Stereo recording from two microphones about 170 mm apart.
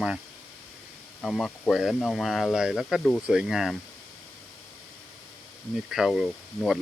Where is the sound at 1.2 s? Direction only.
Centre (ahead or behind).